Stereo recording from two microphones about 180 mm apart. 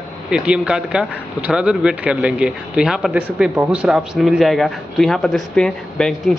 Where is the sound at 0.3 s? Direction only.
5° right (ahead or behind).